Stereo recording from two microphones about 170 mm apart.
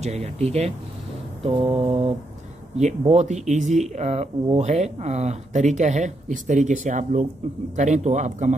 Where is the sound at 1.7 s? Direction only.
35° right (ahead or behind).